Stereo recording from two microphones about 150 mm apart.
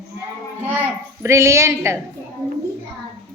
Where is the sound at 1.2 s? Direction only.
20° right (ahead or behind).